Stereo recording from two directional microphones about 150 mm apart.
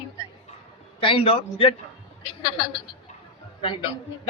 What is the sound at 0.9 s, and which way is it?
Speech, 35° left (ahead or behind).